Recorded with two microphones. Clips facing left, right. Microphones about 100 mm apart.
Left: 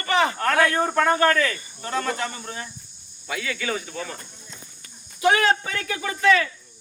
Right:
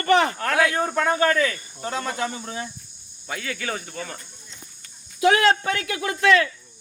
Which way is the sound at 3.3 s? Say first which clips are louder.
Left 2 dB; 45° right (ahead or behind).